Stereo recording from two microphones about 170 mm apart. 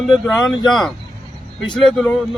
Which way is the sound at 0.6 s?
25° left (ahead or behind).